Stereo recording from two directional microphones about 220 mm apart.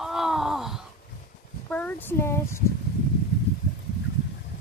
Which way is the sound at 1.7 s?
10° left (ahead or behind).